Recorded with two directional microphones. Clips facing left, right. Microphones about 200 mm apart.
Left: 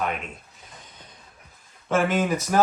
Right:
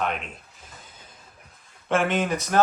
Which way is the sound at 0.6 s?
5° right (ahead or behind).